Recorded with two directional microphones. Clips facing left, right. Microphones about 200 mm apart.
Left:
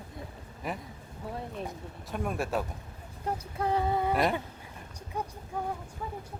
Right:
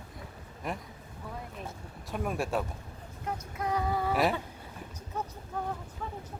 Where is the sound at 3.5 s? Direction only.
30° left (ahead or behind).